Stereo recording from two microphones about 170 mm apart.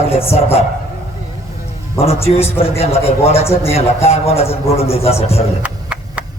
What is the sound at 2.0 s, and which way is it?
A man's voice, 35° left (ahead or behind).